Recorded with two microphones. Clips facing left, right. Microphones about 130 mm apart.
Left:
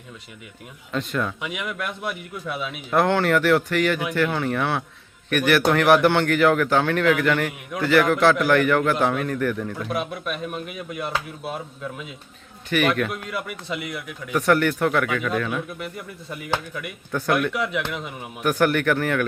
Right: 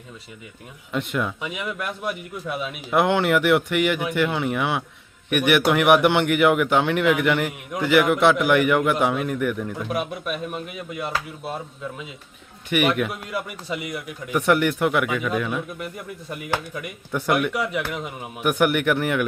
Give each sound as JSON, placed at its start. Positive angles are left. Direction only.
{"t": 0.9, "sound": "a man's voice", "side_deg": -15}
{"t": 1.5, "sound": "a man's voice", "side_deg": -5}
{"t": 3.0, "sound": "a man's voice", "side_deg": -15}
{"t": 12.8, "sound": "a man's voice", "side_deg": -10}
{"t": 14.4, "sound": "a man's voice", "side_deg": -20}
{"t": 18.4, "sound": "a man's voice", "side_deg": -20}